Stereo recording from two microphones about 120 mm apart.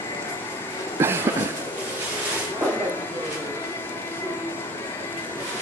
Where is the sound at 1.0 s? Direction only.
20° right (ahead or behind).